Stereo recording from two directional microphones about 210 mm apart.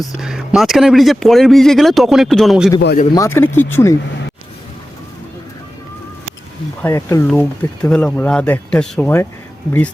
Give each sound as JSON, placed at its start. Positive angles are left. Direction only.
{"t": 0.2, "sound": "speech", "side_deg": 0}
{"t": 2.8, "sound": "speech", "side_deg": 40}
{"t": 3.2, "sound": "speech", "side_deg": 10}
{"t": 6.8, "sound": "speech", "side_deg": 10}